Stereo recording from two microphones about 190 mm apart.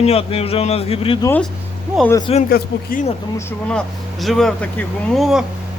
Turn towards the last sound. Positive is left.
turn(degrees=0)  # may be behind; listen again after turning